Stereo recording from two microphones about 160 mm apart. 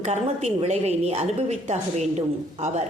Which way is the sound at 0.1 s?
45° right (ahead or behind).